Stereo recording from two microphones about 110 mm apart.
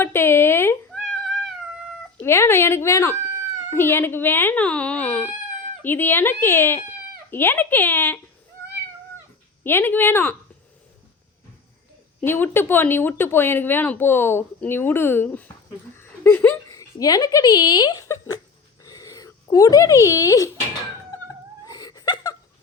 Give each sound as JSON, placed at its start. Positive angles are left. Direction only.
{"t": 0.0, "sound": "a sound", "side_deg": 20}
{"t": 0.9, "sound": "cat", "side_deg": 0}
{"t": 2.2, "sound": "speech", "side_deg": 25}
{"t": 9.6, "sound": "speech", "side_deg": 20}
{"t": 12.2, "sound": "speech", "side_deg": 20}
{"t": 16.0, "sound": "a sound", "side_deg": 20}
{"t": 16.6, "sound": "speech", "side_deg": 35}
{"t": 18.8, "sound": "a sound", "side_deg": 35}
{"t": 21.6, "sound": "whimper", "side_deg": 35}